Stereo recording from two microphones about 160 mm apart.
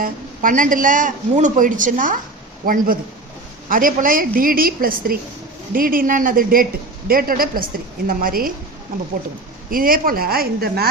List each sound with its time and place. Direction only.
0.0 s speech: 55° right (ahead or behind)
9.6 s a woman's voice: 65° right (ahead or behind)